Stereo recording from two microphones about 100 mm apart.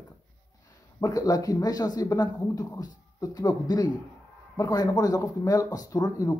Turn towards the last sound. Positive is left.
turn(degrees=35)  # may be behind; listen again after turning